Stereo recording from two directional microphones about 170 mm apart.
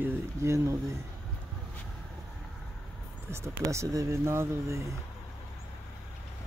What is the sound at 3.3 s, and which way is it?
Speech, 15° right (ahead or behind).